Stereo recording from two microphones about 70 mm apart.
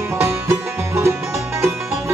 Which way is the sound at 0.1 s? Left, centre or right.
Right.